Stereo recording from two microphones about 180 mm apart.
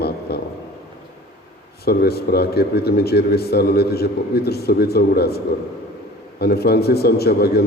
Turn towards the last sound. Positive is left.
turn(degrees=60)  # may be behind; listen again after turning